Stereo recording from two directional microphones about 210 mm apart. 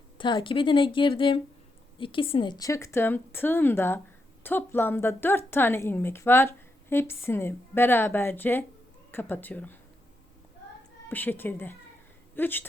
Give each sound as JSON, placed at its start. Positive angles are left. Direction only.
{"t": 0.2, "sound": "a woman's voice", "side_deg": 25}
{"t": 11.1, "sound": "a woman's voice", "side_deg": 10}